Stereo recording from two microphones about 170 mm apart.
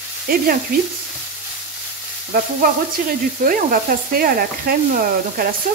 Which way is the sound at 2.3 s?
60° right (ahead or behind).